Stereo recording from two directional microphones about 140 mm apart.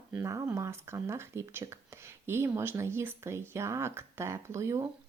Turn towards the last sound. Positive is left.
turn(degrees=-20)  # may be behind; listen again after turning